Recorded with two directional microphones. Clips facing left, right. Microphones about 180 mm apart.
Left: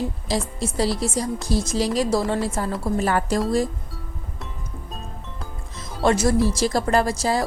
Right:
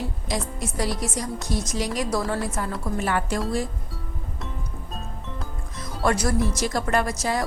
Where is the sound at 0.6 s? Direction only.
30° left (ahead or behind).